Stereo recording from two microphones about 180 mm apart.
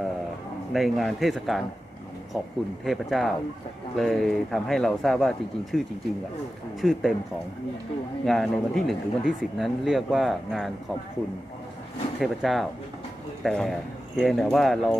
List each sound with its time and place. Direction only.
0.7 s speech: centre (ahead or behind)
2.8 s speech: centre (ahead or behind)
6.8 s speech: centre (ahead or behind)
8.3 s speech: centre (ahead or behind)
12.2 s speech: centre (ahead or behind)